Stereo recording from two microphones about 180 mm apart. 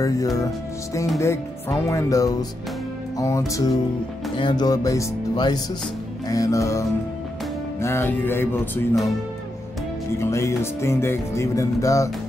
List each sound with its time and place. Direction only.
0.0 s music: 20° left (ahead or behind)
4.4 s speech: 25° left (ahead or behind)
6.2 s music: 20° left (ahead or behind)
10.1 s music: 15° left (ahead or behind)